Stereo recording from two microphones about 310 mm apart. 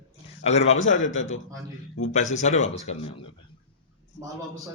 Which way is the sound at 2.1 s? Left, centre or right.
Left.